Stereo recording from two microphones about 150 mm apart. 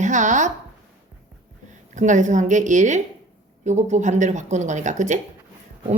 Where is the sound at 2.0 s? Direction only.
55° right (ahead or behind).